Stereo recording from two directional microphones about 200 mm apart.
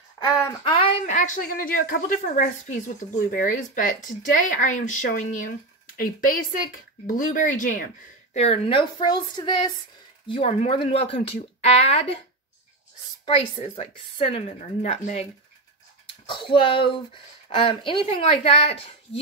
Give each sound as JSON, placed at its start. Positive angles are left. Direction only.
{"t": 0.5, "sound": "speech", "side_deg": 25}
{"t": 13.2, "sound": "speech", "side_deg": 30}
{"t": 16.3, "sound": "speech", "side_deg": 25}